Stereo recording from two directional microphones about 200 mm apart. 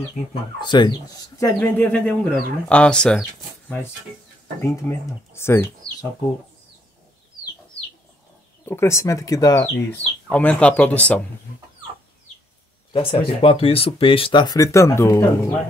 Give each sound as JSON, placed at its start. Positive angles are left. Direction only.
{"t": 0.3, "sound": "speech", "side_deg": 20}
{"t": 1.4, "sound": "speech", "side_deg": 10}
{"t": 8.6, "sound": "speech", "side_deg": 10}
{"t": 10.3, "sound": "speech", "side_deg": 5}
{"t": 12.9, "sound": "speech", "side_deg": 30}